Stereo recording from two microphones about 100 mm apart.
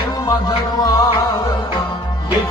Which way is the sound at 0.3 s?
35° left (ahead or behind).